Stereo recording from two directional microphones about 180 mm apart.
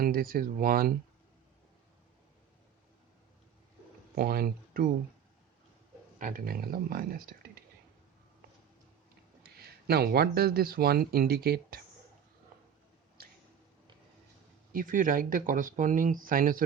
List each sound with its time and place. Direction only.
0.0 s speech: 55° right (ahead or behind)
4.1 s speech: 55° right (ahead or behind)
6.1 s speech: 50° right (ahead or behind)
9.4 s speech: 60° right (ahead or behind)
12.5 s a sound: 55° right (ahead or behind)
14.7 s speech: 50° right (ahead or behind)